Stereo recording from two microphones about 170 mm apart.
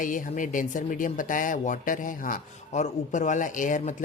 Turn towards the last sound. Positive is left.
turn(degrees=45)  # may be behind; listen again after turning